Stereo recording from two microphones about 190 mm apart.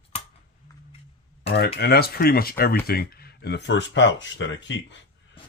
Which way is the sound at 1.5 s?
60° left (ahead or behind).